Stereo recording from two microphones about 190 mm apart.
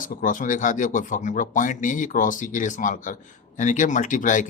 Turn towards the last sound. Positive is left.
turn(degrees=40)  # may be behind; listen again after turning